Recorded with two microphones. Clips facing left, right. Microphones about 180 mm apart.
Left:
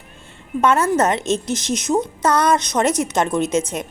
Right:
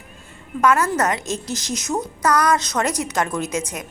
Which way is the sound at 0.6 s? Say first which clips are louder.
Left 2 dB; 25° left (ahead or behind).